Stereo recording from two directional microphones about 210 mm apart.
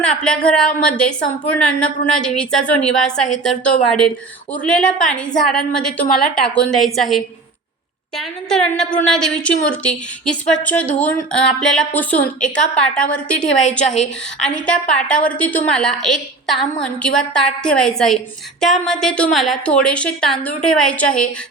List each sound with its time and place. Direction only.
0.0 s a woman's voice: 5° left (ahead or behind)
14.5 s a woman's voice: 5° left (ahead or behind)